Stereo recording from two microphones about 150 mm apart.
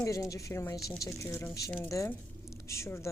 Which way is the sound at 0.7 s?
Centre (ahead or behind).